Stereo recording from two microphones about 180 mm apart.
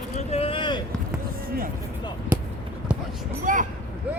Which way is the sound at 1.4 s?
55° right (ahead or behind).